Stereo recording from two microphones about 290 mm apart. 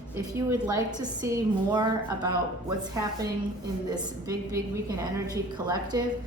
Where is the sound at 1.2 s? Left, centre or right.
Centre.